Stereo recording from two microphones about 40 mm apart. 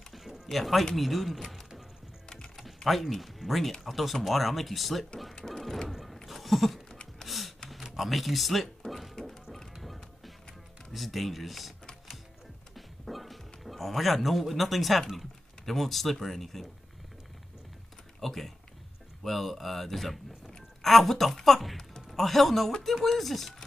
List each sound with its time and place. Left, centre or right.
0.1 s a sound: centre
0.9 s speech: centre
2.2 s typing: centre
2.5 s speech: centre
5.4 s music: centre
6.2 s a sound: centre
6.9 s a sound: centre
7.2 s a sound: centre
7.9 s speech: centre
9.3 s music: centre
10.9 s speech: centre
12.7 s speech: centre
18.2 s speech: centre